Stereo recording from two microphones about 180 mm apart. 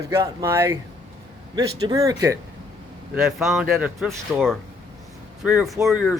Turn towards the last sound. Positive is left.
turn(degrees=0)  # may be behind; listen again after turning